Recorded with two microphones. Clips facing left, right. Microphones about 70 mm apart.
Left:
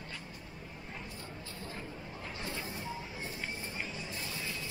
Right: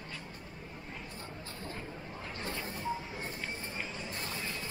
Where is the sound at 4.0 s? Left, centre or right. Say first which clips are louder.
Right 1 dB; right.